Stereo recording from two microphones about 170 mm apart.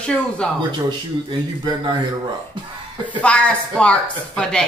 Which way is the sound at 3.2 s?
5° left (ahead or behind).